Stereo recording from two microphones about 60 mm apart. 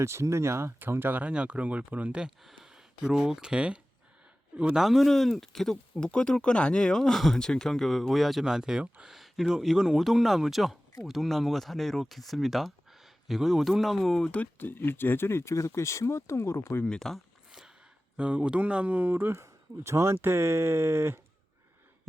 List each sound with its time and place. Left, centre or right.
0.0 s speech: right
0.8 s speech: right
1.2 s speech: right
2.4 s speech: centre
4.7 s speech: centre
5.7 s speech: centre
9.1 s speech: centre
14.6 s speech: left
16.8 s speech: centre
18.2 s speech: centre; by 21.2 s right